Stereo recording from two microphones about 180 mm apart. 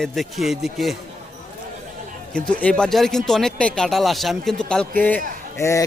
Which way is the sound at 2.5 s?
5° left (ahead or behind).